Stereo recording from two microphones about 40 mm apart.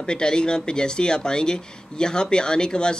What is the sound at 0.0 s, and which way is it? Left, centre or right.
Speech, left.